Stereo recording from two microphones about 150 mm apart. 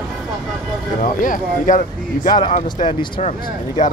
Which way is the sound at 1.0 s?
65° left (ahead or behind).